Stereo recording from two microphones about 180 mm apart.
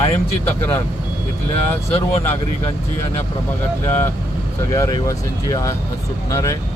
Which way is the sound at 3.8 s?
15° left (ahead or behind).